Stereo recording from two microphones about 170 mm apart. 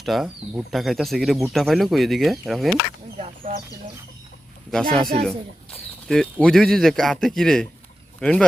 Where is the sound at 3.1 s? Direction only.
40° right (ahead or behind).